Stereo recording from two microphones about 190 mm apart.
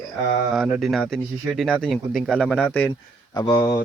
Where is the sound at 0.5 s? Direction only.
Centre (ahead or behind).